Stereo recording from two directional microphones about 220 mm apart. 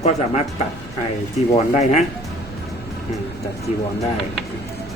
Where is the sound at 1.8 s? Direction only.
30° left (ahead or behind).